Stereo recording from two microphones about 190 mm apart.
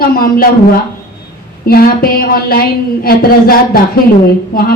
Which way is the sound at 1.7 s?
50° left (ahead or behind).